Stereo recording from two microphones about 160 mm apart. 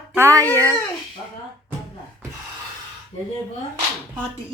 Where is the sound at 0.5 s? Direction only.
20° right (ahead or behind).